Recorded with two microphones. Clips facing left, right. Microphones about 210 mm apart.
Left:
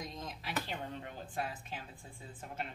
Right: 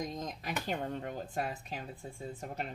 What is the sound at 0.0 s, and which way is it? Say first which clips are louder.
Speech: right 5 dB; 45° right (ahead or behind).